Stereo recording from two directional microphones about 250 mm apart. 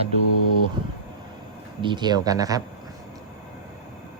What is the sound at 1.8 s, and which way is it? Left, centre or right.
Speech, centre.